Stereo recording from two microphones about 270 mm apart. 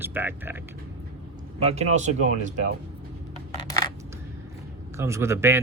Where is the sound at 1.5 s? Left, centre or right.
Right.